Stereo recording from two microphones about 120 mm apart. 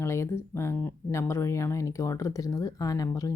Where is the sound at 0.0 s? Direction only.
20° left (ahead or behind).